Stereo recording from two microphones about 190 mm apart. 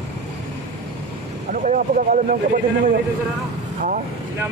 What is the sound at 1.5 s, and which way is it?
Speech, 40° right (ahead or behind).